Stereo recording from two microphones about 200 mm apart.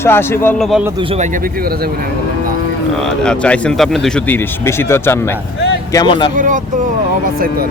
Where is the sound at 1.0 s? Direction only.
30° right (ahead or behind); by 1.9 s 50° right (ahead or behind).